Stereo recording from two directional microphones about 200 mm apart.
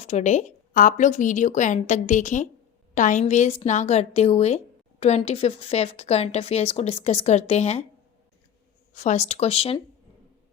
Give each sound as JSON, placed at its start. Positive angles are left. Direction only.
{"t": 0.0, "sound": "a woman's voice", "side_deg": 35}
{"t": 8.9, "sound": "a woman's voice", "side_deg": 35}